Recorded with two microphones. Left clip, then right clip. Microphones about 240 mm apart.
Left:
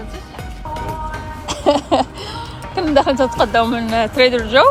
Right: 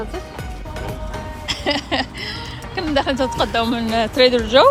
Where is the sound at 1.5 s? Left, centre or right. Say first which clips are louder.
Left 6 dB; centre.